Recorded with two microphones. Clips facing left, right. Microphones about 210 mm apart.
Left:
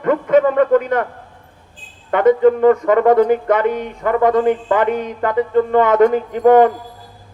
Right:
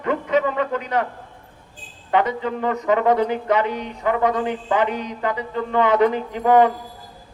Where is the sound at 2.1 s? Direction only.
50° left (ahead or behind).